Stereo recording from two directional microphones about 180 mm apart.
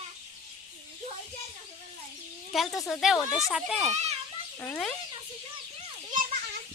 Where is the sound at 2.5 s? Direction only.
Centre (ahead or behind).